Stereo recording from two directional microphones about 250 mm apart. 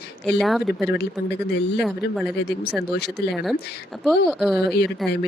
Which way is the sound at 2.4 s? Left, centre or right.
Left.